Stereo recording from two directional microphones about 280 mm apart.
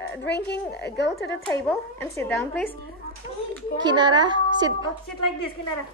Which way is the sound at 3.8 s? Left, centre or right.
Centre.